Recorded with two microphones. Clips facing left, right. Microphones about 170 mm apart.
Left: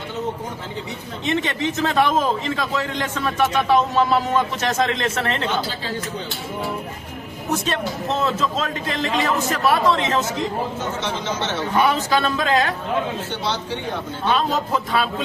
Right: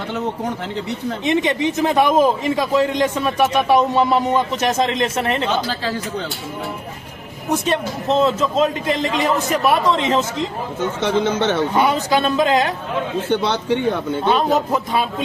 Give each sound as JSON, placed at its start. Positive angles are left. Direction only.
{"t": 1.2, "sound": "a man's voice", "side_deg": -15}
{"t": 7.5, "sound": "a man's voice", "side_deg": -20}
{"t": 11.0, "sound": "a man's voice", "side_deg": -55}
{"t": 11.7, "sound": "a man's voice", "side_deg": -15}
{"t": 13.3, "sound": "a man's voice", "side_deg": -60}
{"t": 14.3, "sound": "a man's voice", "side_deg": -20}